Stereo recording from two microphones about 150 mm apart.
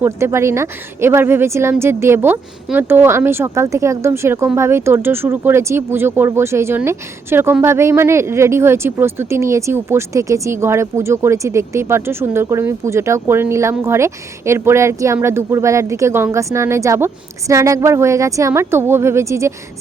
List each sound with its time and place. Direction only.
0.0 s speech: 20° right (ahead or behind)